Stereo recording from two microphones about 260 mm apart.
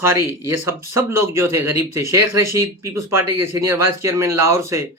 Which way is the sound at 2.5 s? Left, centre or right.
Centre.